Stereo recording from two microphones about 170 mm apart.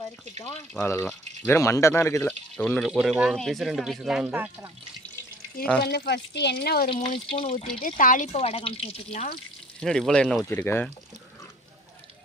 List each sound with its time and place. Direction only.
0.7 s speech: 10° left (ahead or behind)
5.8 s speech: 75° left (ahead or behind)
6.8 s speech: 35° left (ahead or behind)
7.8 s speech: 50° left (ahead or behind)
9.8 s speech: 5° left (ahead or behind)